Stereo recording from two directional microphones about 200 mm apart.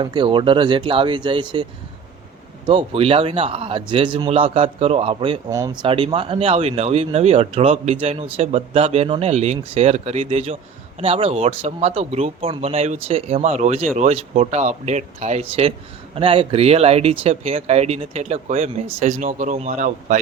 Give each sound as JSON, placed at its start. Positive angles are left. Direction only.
{"t": 0.0, "sound": "speech", "side_deg": -25}
{"t": 2.6, "sound": "speech", "side_deg": -25}
{"t": 5.5, "sound": "speech", "side_deg": -15}